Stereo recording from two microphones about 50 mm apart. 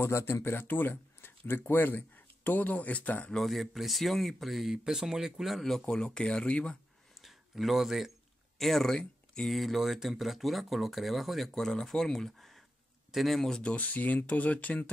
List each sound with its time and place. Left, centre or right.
0.0 s speech: left
3.4 s speech: centre; by 6.8 s left
7.2 s a sound: centre
8.5 s speech: centre
9.6 s speech: centre
13.6 s speech: left